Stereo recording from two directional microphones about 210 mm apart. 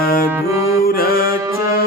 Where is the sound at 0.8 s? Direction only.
45° left (ahead or behind).